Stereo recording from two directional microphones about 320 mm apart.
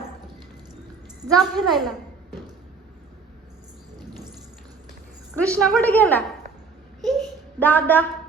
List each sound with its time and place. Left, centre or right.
1.3 s a woman's voice: centre
5.3 s a woman's voice: centre
7.0 s a sound: centre